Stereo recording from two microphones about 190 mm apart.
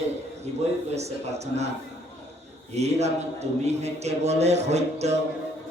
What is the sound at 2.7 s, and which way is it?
A man's voice, 35° right (ahead or behind).